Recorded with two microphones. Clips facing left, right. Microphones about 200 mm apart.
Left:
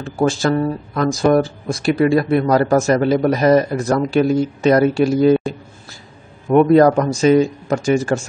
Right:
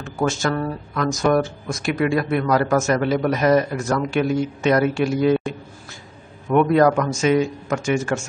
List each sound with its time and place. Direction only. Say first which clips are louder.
0.0 s speech: left 5 dB; 30° left (ahead or behind)
6.5 s speech: left 5 dB; 35° left (ahead or behind)